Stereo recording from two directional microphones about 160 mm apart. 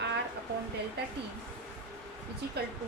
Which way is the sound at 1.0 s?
90° right.